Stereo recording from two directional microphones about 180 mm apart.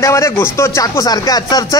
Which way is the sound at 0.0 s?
15° left (ahead or behind).